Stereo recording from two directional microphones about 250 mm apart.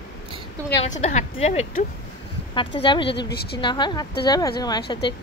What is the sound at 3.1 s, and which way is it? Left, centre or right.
Speech, left.